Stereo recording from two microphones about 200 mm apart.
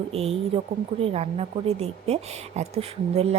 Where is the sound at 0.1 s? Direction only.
30° right (ahead or behind).